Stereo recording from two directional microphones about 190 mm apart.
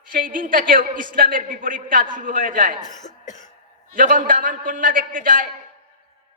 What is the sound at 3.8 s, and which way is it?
A man's voice, 45° right (ahead or behind).